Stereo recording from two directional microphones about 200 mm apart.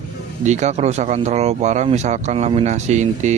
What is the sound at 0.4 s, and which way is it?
Speech, 35° right (ahead or behind).